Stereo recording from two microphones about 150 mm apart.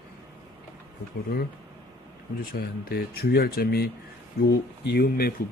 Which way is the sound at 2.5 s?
85° left.